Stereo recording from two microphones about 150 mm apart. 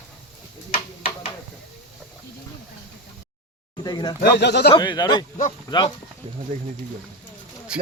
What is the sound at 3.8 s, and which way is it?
Speech, 30° left (ahead or behind).